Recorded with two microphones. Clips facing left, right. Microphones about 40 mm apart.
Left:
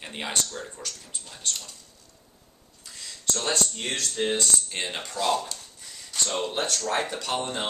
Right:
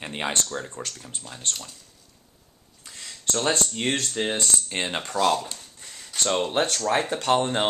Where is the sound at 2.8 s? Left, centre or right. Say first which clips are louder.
Right 1 dB; right.